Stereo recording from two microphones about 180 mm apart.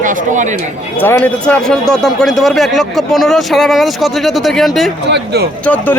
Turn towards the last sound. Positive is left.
turn(degrees=10)  # may be behind; listen again after turning